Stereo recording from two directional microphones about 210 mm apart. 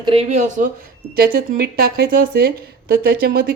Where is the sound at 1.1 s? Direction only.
45° right (ahead or behind).